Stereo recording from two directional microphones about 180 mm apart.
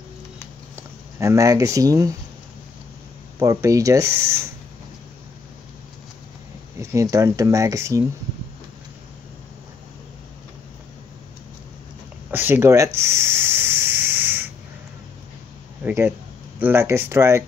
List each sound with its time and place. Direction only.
0.7 s speech: 15° right (ahead or behind)
3.3 s speech: 15° right (ahead or behind)
6.8 s speech: 15° right (ahead or behind)
12.3 s a sound: 10° right (ahead or behind)
15.8 s speech: 15° right (ahead or behind)